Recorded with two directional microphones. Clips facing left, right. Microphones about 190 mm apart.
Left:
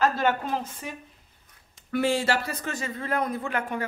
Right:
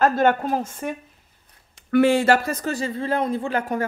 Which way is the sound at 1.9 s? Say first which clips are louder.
Right 8 dB; 65° right (ahead or behind).